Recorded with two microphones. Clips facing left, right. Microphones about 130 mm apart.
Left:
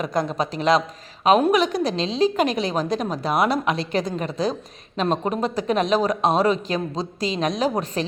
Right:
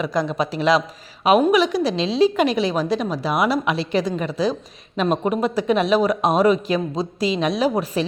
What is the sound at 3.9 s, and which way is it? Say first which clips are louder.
Speech: right 3 dB; 45° left (ahead or behind).